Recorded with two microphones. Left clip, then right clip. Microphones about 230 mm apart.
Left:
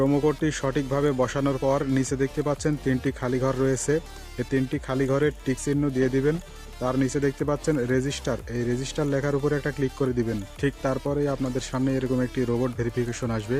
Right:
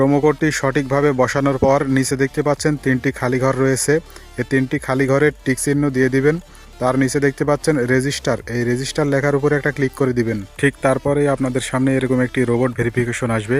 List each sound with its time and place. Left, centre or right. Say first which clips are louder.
0.0 s speech: right 8 dB; right